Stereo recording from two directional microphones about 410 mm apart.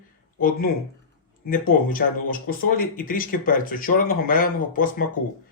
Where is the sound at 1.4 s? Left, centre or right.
Left.